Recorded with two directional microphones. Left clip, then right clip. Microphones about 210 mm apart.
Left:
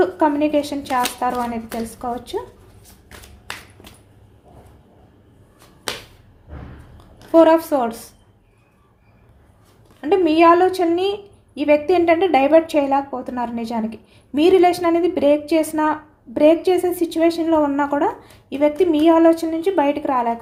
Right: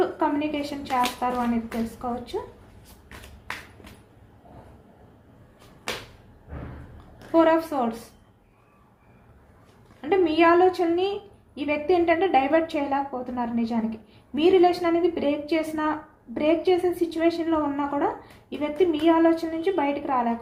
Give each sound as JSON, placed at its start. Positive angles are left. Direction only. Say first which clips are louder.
{"t": 0.0, "sound": "a woman's voice", "louder": "left 7 dB", "side_deg": 55}
{"t": 7.3, "sound": "a woman's voice", "louder": "left 7 dB", "side_deg": 55}
{"t": 10.0, "sound": "a woman's voice", "louder": "left 6 dB", "side_deg": 55}